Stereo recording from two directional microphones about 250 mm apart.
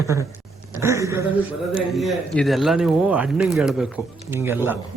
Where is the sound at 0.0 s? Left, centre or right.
Centre.